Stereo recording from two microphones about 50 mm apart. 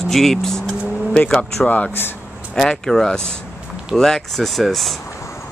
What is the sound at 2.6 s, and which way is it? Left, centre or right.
Speech, centre.